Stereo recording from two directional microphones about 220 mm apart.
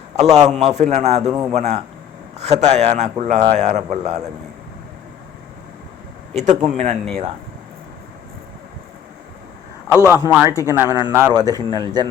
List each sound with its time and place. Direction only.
0.2 s a man's voice: 30° right (ahead or behind)
6.3 s speech: 30° right (ahead or behind)
10.1 s speech: 10° right (ahead or behind)
10.5 s speech: 15° left (ahead or behind)
10.8 s speech: 15° right (ahead or behind)